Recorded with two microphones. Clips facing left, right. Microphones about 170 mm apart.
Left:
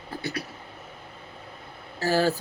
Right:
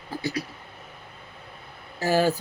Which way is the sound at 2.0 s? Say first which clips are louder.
Right 1 dB; 15° right (ahead or behind).